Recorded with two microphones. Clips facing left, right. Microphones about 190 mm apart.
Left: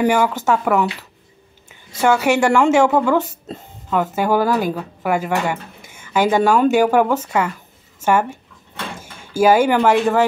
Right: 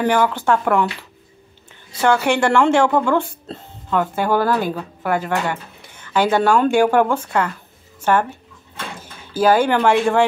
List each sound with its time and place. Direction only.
0.0 s a woman's voice: 10° left (ahead or behind)
2.0 s a woman's voice: 5° left (ahead or behind)
9.0 s a sound: 50° left (ahead or behind)
9.4 s a woman's voice: 10° left (ahead or behind)